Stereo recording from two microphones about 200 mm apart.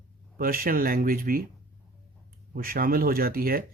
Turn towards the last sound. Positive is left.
turn(degrees=-45)  # may be behind; listen again after turning